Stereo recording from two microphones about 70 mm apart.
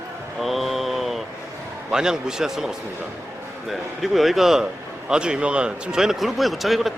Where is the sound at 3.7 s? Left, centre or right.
Centre.